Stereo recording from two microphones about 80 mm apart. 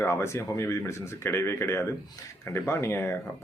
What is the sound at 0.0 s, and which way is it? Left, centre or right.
A man's voice, left.